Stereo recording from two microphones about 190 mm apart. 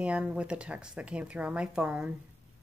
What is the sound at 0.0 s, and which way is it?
A woman's voice, 5° right (ahead or behind).